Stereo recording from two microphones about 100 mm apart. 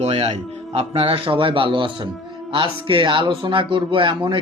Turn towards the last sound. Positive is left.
turn(degrees=-60)  # may be behind; listen again after turning